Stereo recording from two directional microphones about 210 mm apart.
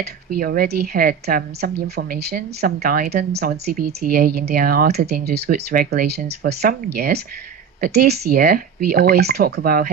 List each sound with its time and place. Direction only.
0.0 s a woman's voice: 45° right (ahead or behind)